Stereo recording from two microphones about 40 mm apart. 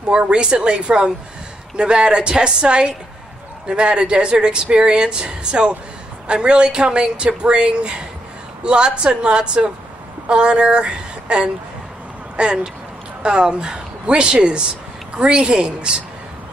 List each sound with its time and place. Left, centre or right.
0.1 s a woman's voice: right